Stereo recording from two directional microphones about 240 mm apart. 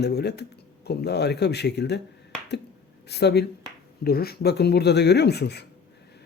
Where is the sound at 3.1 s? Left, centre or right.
Left.